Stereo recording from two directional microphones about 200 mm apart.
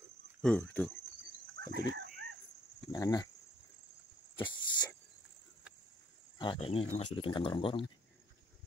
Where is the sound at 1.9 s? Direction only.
45° right (ahead or behind).